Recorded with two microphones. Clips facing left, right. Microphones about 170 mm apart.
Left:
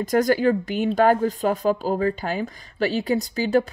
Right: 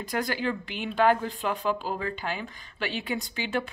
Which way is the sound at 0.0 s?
45° left (ahead or behind).